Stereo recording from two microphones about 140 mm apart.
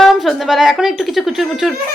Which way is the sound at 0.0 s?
Centre (ahead or behind).